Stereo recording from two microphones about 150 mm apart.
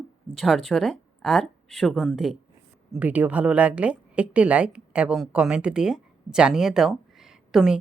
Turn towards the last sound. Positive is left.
turn(degrees=0)  # may be behind; listen again after turning